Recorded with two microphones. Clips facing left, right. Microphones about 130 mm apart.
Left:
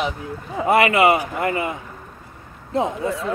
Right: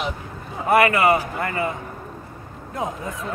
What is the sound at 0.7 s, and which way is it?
A man's voice, 25° left (ahead or behind).